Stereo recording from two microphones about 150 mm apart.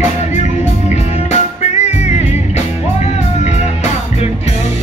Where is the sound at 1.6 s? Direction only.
50° left (ahead or behind).